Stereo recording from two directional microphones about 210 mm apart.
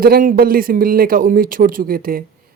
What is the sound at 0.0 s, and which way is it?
Speech, 40° right (ahead or behind).